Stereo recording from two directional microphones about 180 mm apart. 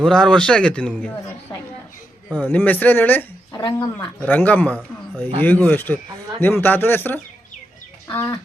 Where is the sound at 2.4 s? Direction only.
10° left (ahead or behind).